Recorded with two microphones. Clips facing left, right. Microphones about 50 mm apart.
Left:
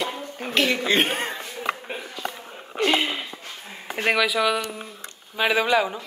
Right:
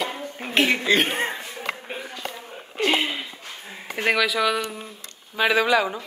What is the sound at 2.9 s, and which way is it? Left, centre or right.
Speech, centre.